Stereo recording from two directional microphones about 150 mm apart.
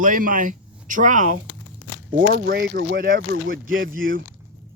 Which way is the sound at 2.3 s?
75° right (ahead or behind).